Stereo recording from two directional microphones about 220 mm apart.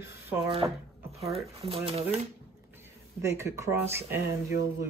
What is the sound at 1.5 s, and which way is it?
Speech, 25° right (ahead or behind).